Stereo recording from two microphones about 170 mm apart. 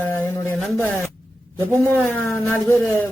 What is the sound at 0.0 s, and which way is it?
Speech, 10° left (ahead or behind).